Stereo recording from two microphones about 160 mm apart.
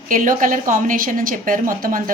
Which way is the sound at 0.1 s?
55° right (ahead or behind).